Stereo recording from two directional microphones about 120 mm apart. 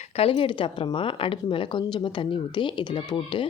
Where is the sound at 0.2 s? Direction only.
50° left (ahead or behind).